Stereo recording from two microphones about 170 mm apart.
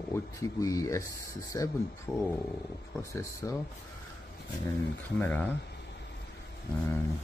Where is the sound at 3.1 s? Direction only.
20° left (ahead or behind).